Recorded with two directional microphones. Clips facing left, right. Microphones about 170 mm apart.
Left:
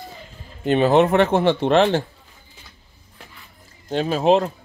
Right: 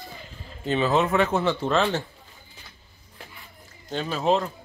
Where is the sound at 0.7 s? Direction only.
60° left (ahead or behind).